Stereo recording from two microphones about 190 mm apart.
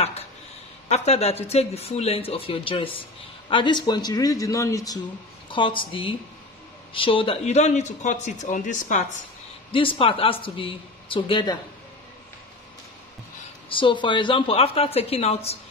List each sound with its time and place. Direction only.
0.8 s speech: 35° left (ahead or behind)
9.7 s speech: 30° left (ahead or behind)
13.7 s speech: 25° left (ahead or behind)